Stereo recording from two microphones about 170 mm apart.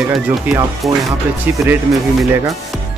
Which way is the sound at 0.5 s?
10° right (ahead or behind).